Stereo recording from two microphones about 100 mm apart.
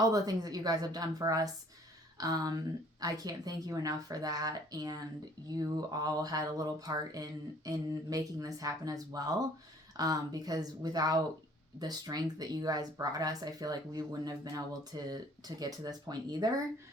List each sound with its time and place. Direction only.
0.0 s speech: 40° right (ahead or behind)